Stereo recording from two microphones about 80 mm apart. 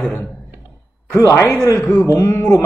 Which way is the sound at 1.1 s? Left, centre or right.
Left.